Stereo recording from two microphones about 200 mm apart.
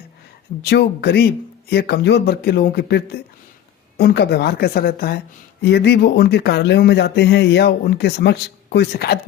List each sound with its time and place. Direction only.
0.6 s speech: 55° left (ahead or behind)